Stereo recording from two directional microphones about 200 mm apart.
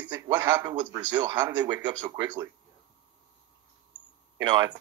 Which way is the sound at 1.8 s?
20° right (ahead or behind).